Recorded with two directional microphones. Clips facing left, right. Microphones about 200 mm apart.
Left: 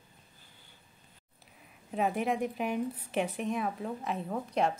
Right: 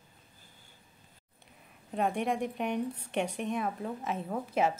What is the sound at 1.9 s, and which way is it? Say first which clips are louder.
A woman's voice: even; centre (ahead or behind).